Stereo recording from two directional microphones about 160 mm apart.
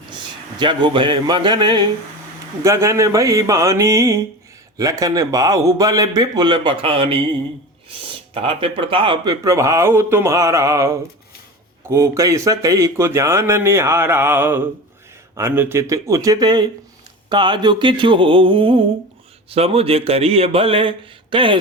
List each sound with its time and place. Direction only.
0.6 s a man's voice: 30° right (ahead or behind)